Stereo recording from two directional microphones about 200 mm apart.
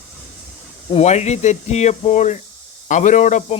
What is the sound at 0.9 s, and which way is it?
Speech, 35° left (ahead or behind).